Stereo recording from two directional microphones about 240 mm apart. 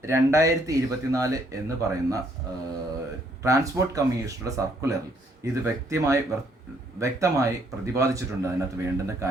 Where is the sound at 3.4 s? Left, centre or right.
Centre.